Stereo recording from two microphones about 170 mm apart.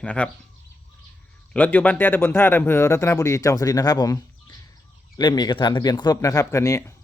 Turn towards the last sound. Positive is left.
turn(degrees=15)  # may be behind; listen again after turning